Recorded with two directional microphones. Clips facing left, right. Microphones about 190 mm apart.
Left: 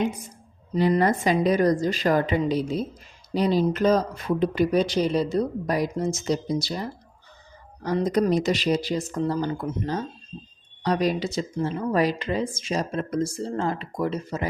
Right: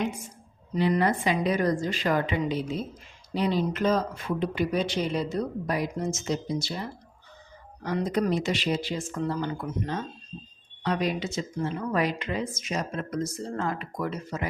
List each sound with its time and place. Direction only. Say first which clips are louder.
0.0 s speech: left 4 dB; 35° left (ahead or behind)
7.9 s speech: left 4 dB; 40° left (ahead or behind)